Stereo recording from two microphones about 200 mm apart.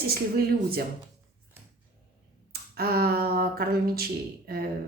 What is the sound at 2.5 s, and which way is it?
Speech, 50° right (ahead or behind).